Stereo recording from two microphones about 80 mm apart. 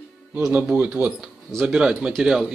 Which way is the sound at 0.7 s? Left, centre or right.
Centre.